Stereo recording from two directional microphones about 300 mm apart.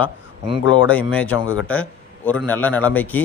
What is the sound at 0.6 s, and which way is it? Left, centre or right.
Speech, left.